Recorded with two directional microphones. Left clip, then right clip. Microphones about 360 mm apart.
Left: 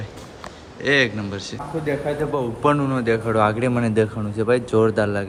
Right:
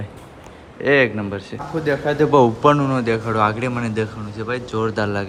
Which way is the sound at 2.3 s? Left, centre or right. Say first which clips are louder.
Right 15 dB; right.